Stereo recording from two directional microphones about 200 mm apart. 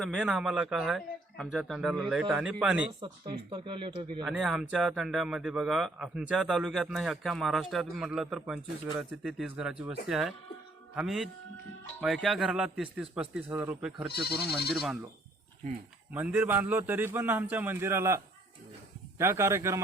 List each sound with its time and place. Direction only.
0.0 s a man's voice: centre (ahead or behind)
3.0 s speech: 25° right (ahead or behind)
4.3 s a man's voice: 5° right (ahead or behind)
14.1 s speech: 55° left (ahead or behind)
16.1 s a man's voice: 5° right (ahead or behind)
19.2 s a man's voice: 15° right (ahead or behind)